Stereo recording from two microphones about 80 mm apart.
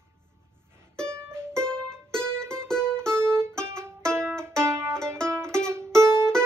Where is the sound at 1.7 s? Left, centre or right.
Centre.